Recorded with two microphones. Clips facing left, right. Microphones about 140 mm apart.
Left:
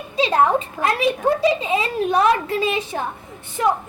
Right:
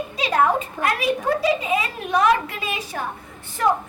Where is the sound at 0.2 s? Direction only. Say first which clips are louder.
Left 3 dB; 25° left (ahead or behind).